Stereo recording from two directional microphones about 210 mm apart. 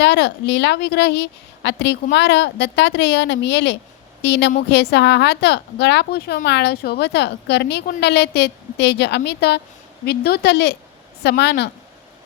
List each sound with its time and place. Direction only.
0.0 s a woman's voice: 55° left (ahead or behind)